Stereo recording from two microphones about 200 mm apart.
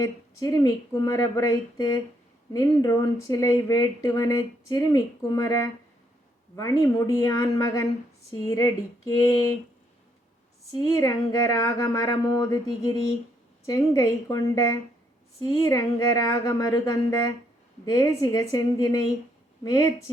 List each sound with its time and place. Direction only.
0.0 s speech: 15° left (ahead or behind)
10.7 s speech: 15° left (ahead or behind)